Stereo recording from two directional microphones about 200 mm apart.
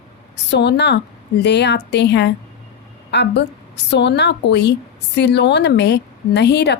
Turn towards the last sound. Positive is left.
turn(degrees=60)  # may be behind; listen again after turning